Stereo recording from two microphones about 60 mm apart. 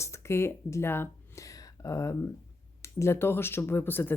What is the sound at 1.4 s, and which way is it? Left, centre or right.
Speech, left.